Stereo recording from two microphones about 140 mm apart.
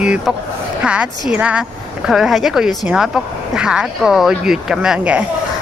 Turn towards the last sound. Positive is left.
turn(degrees=-5)  # may be behind; listen again after turning